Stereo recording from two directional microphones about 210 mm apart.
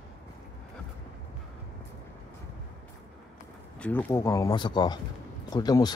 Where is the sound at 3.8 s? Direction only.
10° left (ahead or behind).